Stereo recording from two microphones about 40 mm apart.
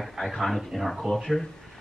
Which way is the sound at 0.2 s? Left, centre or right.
Centre.